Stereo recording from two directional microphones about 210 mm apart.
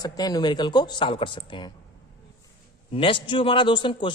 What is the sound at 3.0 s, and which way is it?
A woman's voice, 25° left (ahead or behind).